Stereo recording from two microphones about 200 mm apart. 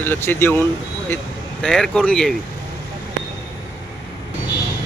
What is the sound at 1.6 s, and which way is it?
Speech, 5° left (ahead or behind).